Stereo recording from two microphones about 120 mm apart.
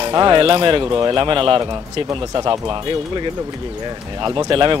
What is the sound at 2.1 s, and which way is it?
Speech, 35° right (ahead or behind).